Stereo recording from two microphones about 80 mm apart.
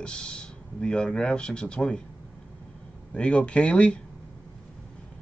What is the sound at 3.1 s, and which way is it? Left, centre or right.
Speech, centre.